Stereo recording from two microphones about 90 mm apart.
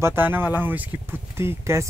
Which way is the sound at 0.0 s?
25° right (ahead or behind).